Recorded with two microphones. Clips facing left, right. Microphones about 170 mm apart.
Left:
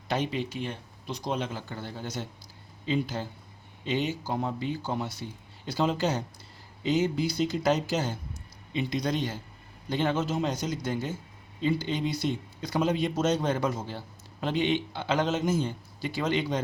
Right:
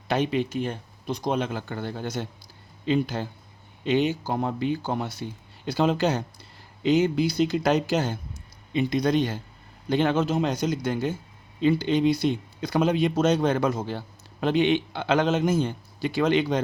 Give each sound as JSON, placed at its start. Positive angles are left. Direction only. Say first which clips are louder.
{"t": 0.1, "sound": "speech", "louder": "right 5 dB", "side_deg": -60}